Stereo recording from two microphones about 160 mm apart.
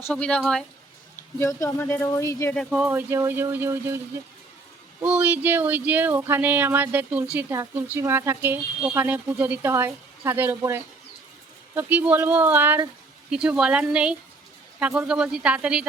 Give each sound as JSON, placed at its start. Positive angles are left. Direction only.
{"t": 0.1, "sound": "speech", "side_deg": 5}
{"t": 1.4, "sound": "speech", "side_deg": 20}
{"t": 2.6, "sound": "speech", "side_deg": -5}
{"t": 5.0, "sound": "speech", "side_deg": -10}